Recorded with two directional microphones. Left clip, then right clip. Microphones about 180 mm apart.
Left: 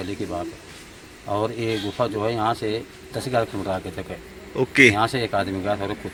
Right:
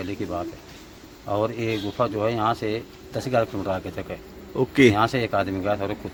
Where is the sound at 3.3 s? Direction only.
Centre (ahead or behind).